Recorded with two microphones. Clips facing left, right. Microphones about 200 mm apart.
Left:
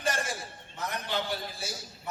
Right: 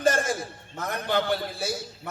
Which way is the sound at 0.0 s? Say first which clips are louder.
Right 9 dB; 50° right (ahead or behind).